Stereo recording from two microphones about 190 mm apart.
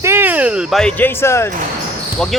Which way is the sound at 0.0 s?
10° right (ahead or behind).